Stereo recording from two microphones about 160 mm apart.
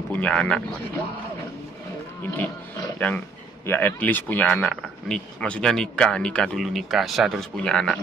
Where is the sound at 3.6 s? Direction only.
15° left (ahead or behind).